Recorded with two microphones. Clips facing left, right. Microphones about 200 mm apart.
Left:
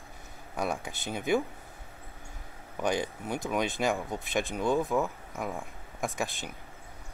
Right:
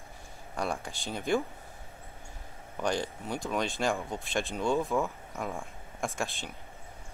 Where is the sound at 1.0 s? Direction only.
15° left (ahead or behind).